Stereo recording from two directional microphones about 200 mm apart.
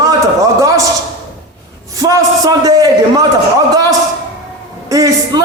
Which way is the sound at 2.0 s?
15° right (ahead or behind).